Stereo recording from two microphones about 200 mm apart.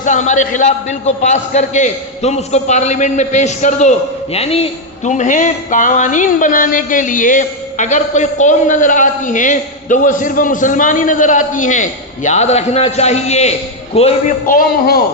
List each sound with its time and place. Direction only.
0.0 s a man's voice: 40° left (ahead or behind)
14.4 s a man's voice: 45° left (ahead or behind)